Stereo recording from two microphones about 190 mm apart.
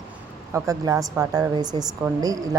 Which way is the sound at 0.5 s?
15° right (ahead or behind).